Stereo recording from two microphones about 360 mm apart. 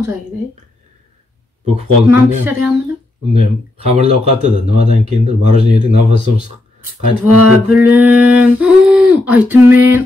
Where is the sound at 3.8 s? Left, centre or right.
Centre.